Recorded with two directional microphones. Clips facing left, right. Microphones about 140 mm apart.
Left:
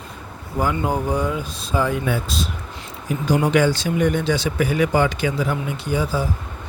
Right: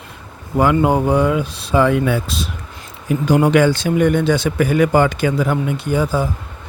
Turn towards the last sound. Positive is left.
turn(degrees=-50)  # may be behind; listen again after turning